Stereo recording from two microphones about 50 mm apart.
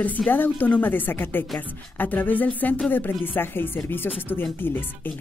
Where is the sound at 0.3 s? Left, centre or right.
Left.